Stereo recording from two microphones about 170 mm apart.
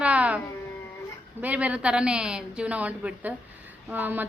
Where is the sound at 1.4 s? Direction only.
10° right (ahead or behind).